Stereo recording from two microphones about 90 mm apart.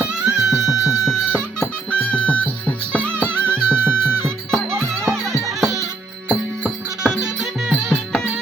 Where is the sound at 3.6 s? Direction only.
25° right (ahead or behind).